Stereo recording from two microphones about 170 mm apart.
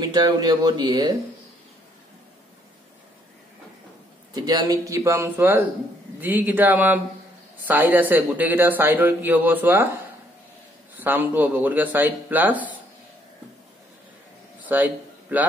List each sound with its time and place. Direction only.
0.0 s speech: 25° right (ahead or behind)
4.3 s a man's voice: 20° right (ahead or behind)
11.0 s a man's voice: 10° right (ahead or behind)
14.6 s a sound: 10° right (ahead or behind)